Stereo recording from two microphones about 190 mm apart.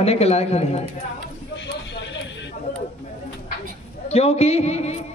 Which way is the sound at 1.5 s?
70° left (ahead or behind).